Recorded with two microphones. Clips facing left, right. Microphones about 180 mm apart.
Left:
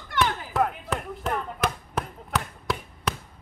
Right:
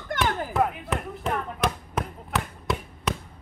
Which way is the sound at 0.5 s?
Centre (ahead or behind).